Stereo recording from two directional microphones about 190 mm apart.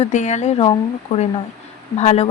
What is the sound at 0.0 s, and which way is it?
Speech, 40° left (ahead or behind).